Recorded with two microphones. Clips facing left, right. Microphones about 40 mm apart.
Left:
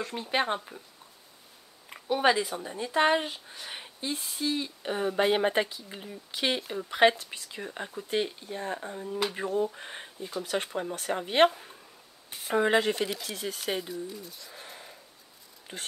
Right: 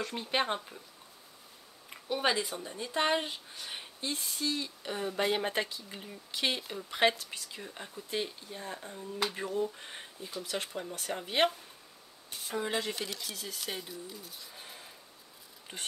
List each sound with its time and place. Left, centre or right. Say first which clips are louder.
0.0 s speech: left 3 dB; centre
1.9 s speech: left 6 dB; centre
12.5 s speech: left 9 dB; left
12.9 s speech: left 7 dB; centre
13.7 s speech: left 7 dB; centre
14.6 s a sound: left 3 dB; centre